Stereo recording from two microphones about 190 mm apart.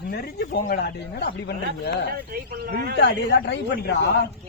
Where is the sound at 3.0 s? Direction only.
60° left (ahead or behind).